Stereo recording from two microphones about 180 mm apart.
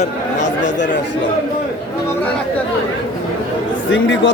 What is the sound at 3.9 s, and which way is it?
Speech, 90° left.